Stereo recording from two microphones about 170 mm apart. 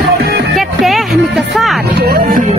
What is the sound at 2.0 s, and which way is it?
Speech, 60° right (ahead or behind).